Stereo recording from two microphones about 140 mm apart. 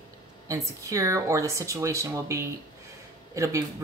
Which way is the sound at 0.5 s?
20° right (ahead or behind).